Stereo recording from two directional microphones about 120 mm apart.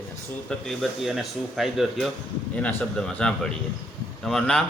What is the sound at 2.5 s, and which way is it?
A man's voice, 10° left (ahead or behind).